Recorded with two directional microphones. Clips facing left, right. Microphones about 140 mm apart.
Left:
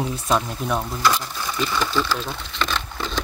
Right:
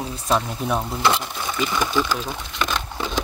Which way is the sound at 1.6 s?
15° right (ahead or behind).